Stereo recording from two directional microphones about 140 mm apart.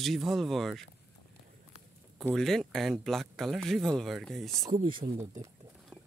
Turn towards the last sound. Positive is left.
turn(degrees=-20)  # may be behind; listen again after turning